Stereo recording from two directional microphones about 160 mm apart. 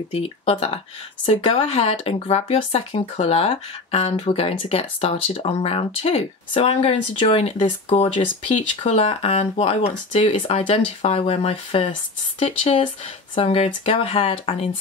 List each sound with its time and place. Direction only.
0.1 s speech: 40° left (ahead or behind)